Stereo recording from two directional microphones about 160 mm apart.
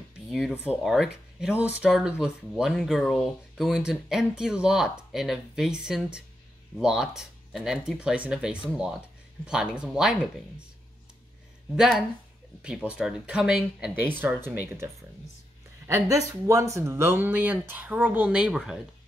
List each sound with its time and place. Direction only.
0.3 s speech: centre (ahead or behind)
11.7 s speech: 5° right (ahead or behind)
15.9 s speech: 20° right (ahead or behind)